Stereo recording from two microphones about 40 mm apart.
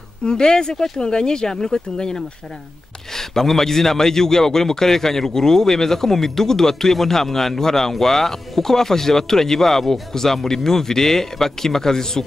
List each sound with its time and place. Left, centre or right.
0.2 s a man's voice: centre